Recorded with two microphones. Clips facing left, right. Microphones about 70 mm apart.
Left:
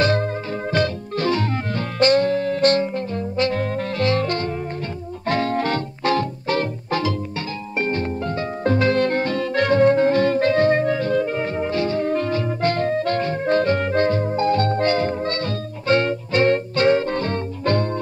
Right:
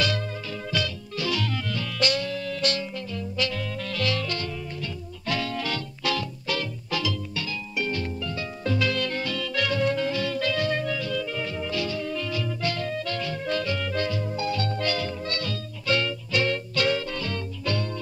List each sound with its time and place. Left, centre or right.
0.0 s music: left